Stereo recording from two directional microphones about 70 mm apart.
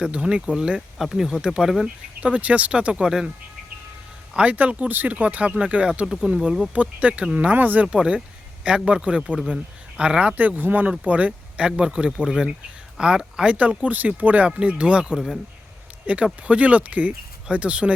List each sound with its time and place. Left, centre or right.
0.0 s speech: centre
2.2 s speech: centre
4.4 s speech: right